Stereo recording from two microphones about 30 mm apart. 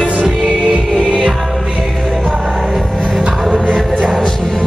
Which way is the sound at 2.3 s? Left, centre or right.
Centre.